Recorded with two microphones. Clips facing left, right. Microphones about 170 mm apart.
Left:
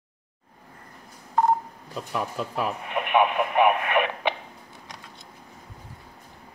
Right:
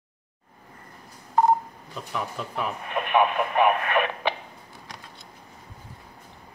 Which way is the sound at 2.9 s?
15° left (ahead or behind).